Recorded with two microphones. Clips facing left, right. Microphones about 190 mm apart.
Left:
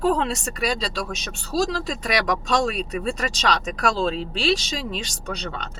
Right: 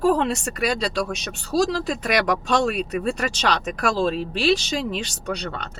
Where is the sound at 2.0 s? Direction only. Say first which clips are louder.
Right 1 dB; 55° right (ahead or behind).